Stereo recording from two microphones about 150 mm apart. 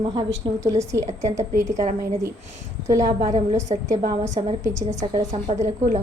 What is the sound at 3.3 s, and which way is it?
A woman's voice, 50° right (ahead or behind).